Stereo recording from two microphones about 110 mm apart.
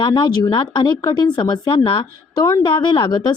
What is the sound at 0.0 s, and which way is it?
A woman's voice, 45° left (ahead or behind).